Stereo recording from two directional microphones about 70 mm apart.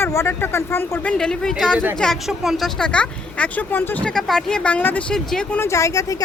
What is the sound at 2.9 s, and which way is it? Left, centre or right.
Speech, centre.